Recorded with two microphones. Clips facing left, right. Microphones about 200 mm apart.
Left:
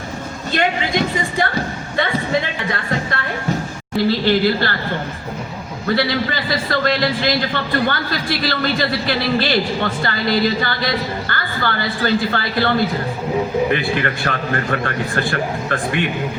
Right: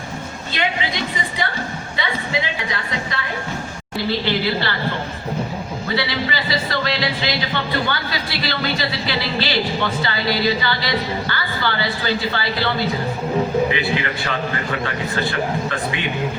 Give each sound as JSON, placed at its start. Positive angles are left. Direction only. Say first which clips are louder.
{"t": 0.5, "sound": "speech", "louder": "left 5 dB", "side_deg": 50}
{"t": 2.0, "sound": "a sound", "louder": "left 5 dB", "side_deg": 55}
{"t": 4.3, "sound": "speech", "louder": "left 5 dB", "side_deg": 50}
{"t": 5.9, "sound": "speech", "louder": "left 5 dB", "side_deg": 50}